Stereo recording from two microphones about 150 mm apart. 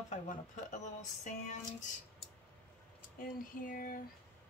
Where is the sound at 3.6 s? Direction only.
65° left (ahead or behind).